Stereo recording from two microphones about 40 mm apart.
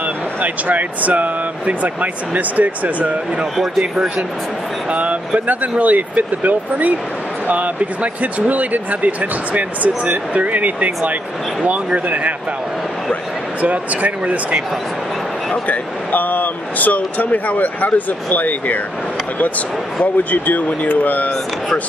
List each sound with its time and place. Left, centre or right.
0.4 s speech: right
4.9 s speech: right
13.6 s speech: right
15.6 s speech: left
20.2 s speech: left